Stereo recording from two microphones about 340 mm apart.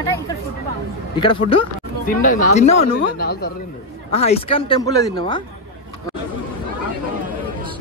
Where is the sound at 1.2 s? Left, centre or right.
Centre.